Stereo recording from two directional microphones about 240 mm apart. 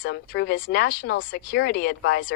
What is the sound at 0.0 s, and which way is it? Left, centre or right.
A woman's voice, left.